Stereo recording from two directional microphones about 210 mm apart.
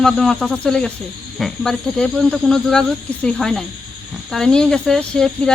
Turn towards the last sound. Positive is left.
turn(degrees=5)  # may be behind; listen again after turning